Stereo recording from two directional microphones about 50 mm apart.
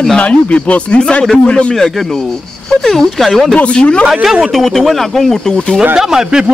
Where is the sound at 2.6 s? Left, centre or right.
Centre.